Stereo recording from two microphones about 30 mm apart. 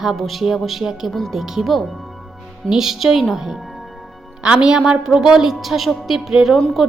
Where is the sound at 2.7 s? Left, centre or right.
Centre.